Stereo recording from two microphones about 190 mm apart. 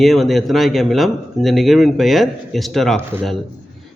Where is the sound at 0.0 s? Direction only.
Centre (ahead or behind).